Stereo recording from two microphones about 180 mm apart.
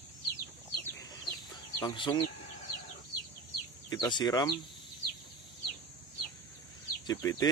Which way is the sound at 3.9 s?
25° left (ahead or behind).